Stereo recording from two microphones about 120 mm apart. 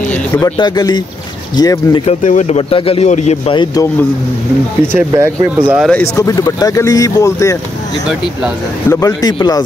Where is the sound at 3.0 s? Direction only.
70° left (ahead or behind).